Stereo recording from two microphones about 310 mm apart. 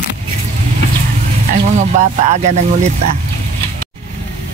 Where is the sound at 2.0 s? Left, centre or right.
Right.